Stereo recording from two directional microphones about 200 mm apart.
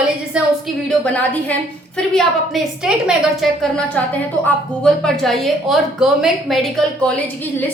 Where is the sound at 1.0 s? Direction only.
5° left (ahead or behind).